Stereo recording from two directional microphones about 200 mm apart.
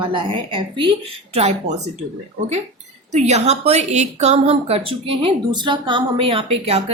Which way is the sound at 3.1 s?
35° right (ahead or behind).